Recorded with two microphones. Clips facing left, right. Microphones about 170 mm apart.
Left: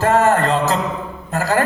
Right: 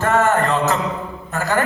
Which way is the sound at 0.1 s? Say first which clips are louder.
Left 2 dB; 35° left (ahead or behind).